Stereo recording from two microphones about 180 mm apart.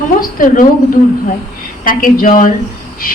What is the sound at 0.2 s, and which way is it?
Speech, 50° left (ahead or behind).